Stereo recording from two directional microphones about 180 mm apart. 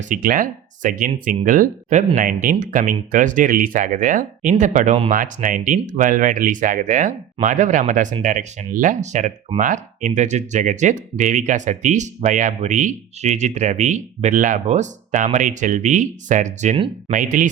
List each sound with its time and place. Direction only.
0.1 s speech: 50° right (ahead or behind)
2.1 s speech: 55° right (ahead or behind); by 5.1 s 35° right (ahead or behind)
5.1 s speech: 50° right (ahead or behind)
16.7 s speech: 30° right (ahead or behind)
17.2 s speech: 50° right (ahead or behind)